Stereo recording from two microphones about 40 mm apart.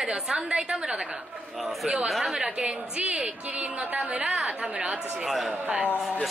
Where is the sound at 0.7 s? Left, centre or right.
Centre.